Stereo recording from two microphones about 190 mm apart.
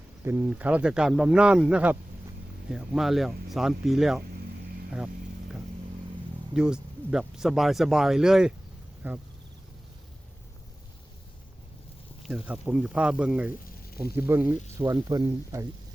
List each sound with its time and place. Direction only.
0.3 s speech: 10° right (ahead or behind)
6.5 s speech: 5° right (ahead or behind)
12.2 s speech: 5° right (ahead or behind)